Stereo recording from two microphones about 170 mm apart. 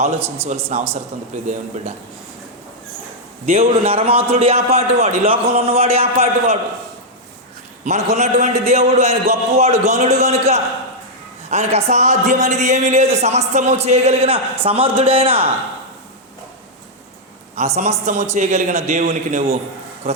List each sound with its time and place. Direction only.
0.0 s a man's voice: 40° right (ahead or behind)
3.8 s a man's voice: 35° right (ahead or behind)
7.9 s a man's voice: 40° right (ahead or behind)
17.6 s a man's voice: 40° right (ahead or behind)
19.0 s a man's voice: 60° right (ahead or behind)